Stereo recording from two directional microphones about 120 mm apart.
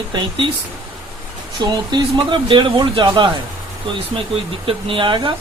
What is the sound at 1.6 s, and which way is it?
Speech, 40° right (ahead or behind).